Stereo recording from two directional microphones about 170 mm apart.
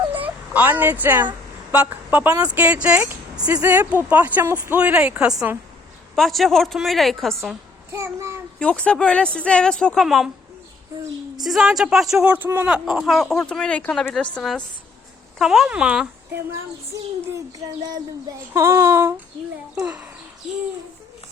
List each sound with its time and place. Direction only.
0.1 s speech: 10° right (ahead or behind)
7.9 s speech: 15° right (ahead or behind)
8.5 s speech: 5° left (ahead or behind)
11.4 s speech: centre (ahead or behind)
17.9 s speech: 20° right (ahead or behind)